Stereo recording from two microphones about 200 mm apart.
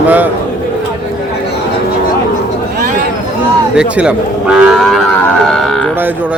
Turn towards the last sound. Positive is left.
turn(degrees=0)  # may be behind; listen again after turning